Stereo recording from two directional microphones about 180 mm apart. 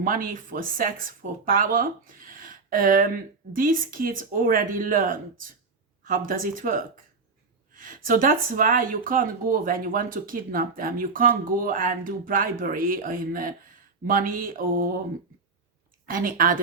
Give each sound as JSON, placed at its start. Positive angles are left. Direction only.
{"t": 0.0, "sound": "speech", "side_deg": -50}
{"t": 16.0, "sound": "speech", "side_deg": -50}